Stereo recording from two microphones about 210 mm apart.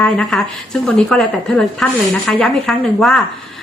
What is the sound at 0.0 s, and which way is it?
A woman's voice, centre (ahead or behind).